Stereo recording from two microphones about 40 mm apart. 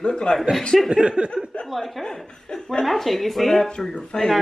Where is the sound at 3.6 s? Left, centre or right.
Left.